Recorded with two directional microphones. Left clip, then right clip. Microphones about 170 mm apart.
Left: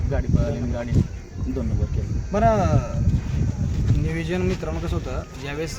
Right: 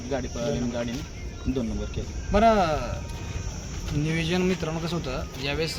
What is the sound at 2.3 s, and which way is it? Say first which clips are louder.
Speech: even; 15° left (ahead or behind).